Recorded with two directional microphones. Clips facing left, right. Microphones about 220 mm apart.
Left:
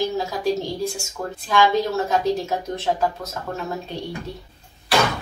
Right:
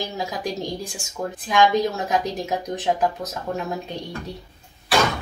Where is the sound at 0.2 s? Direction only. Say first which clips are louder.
Left 4 dB; 15° right (ahead or behind).